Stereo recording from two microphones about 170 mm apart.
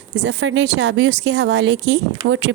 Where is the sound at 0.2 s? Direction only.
90° right.